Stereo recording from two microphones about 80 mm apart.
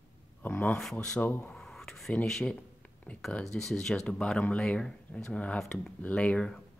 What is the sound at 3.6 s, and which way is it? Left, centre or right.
Speech, centre.